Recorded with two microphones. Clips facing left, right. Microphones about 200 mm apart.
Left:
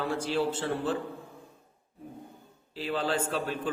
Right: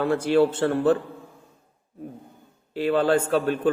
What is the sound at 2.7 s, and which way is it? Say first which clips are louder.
Speech: right 10 dB; 60° right (ahead or behind).